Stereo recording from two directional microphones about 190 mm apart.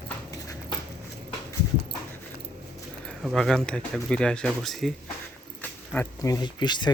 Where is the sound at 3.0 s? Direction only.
Centre (ahead or behind); by 6.9 s 25° left (ahead or behind).